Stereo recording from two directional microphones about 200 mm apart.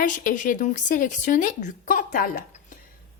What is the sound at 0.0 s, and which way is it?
Speech, 40° left (ahead or behind).